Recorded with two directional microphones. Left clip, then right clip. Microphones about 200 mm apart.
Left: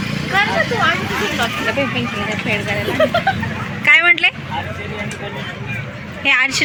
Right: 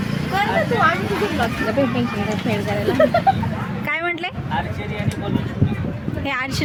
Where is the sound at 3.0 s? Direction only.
60° right (ahead or behind).